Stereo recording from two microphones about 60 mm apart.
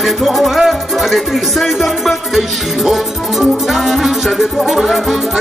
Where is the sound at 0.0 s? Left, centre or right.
Centre.